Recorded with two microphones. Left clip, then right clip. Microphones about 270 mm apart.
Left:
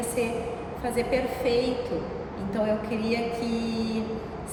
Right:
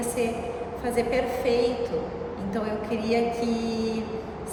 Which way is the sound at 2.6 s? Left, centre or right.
Centre.